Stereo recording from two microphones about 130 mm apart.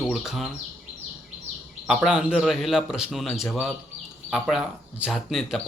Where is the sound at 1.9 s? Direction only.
5° right (ahead or behind).